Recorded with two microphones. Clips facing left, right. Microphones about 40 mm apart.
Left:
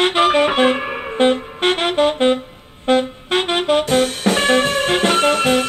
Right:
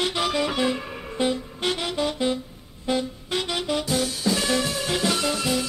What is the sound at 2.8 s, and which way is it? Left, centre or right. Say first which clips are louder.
Saxophone: left 9 dB; left.